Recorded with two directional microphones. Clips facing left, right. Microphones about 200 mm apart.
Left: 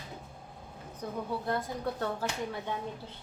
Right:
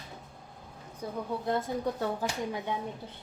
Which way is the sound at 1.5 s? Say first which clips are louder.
Right 5 dB; 20° right (ahead or behind).